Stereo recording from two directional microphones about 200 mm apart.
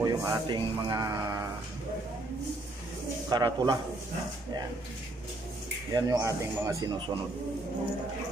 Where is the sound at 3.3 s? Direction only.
20° right (ahead or behind).